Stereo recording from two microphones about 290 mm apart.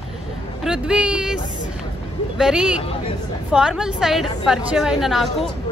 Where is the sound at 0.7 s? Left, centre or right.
Centre.